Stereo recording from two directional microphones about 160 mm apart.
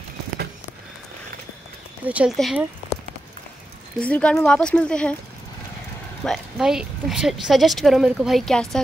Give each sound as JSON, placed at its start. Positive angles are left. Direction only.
{"t": 2.0, "sound": "a woman's voice", "side_deg": -10}
{"t": 4.0, "sound": "speech", "side_deg": 5}
{"t": 6.2, "sound": "a woman's voice", "side_deg": 0}